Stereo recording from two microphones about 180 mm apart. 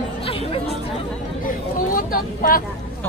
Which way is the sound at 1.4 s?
50° left (ahead or behind).